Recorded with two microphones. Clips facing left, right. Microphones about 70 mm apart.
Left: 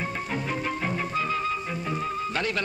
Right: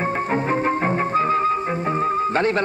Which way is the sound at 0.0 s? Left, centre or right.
Right.